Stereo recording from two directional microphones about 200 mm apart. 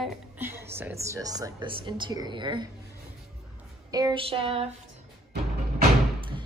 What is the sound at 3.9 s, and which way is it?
Speech, 20° right (ahead or behind).